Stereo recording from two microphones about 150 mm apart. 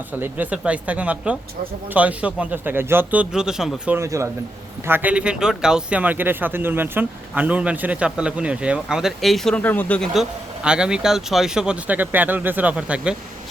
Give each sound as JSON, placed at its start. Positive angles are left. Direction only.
{"t": 0.2, "sound": "speech", "side_deg": -10}
{"t": 3.9, "sound": "speech", "side_deg": -20}
{"t": 10.2, "sound": "speech", "side_deg": -5}